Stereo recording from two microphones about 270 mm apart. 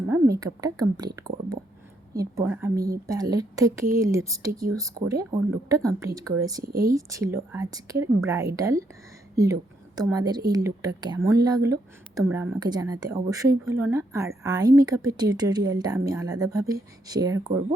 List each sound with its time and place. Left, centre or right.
0.1 s speech: centre
6.6 s speech: right
6.8 s speech: centre